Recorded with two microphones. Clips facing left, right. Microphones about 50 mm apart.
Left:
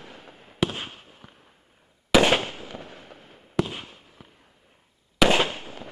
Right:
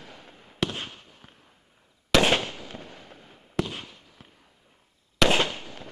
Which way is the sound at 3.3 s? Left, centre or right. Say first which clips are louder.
Left 3 dB; centre.